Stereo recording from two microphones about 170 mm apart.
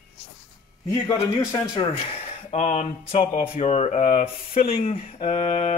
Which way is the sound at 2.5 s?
45° left (ahead or behind).